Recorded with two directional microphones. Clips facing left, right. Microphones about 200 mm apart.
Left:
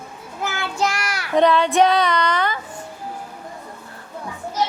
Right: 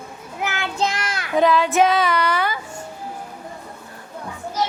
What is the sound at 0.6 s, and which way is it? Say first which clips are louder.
Child singing: left 1 dB; 20° right (ahead or behind).